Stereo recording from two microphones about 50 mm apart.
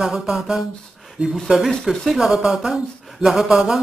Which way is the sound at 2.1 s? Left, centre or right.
Centre.